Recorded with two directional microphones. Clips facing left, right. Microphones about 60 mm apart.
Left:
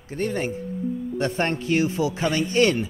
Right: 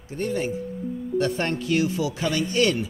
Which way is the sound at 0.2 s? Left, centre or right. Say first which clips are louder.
Left 1 dB; left.